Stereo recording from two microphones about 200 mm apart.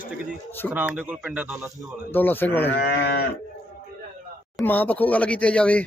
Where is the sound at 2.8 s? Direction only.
55° left (ahead or behind).